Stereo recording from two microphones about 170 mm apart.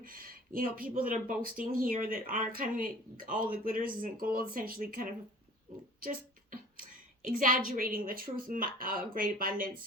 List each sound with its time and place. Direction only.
0.0 s a woman's voice: 55° right (ahead or behind)